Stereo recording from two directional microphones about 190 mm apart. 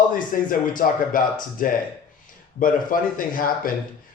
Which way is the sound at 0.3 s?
45° left (ahead or behind).